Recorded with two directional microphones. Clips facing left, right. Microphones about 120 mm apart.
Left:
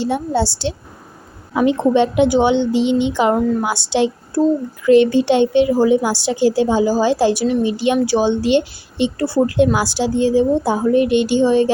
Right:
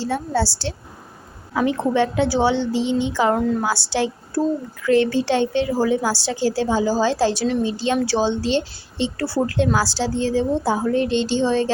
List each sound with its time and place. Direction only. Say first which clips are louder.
0.0 s a woman's voice: left 4 dB; 20° left (ahead or behind)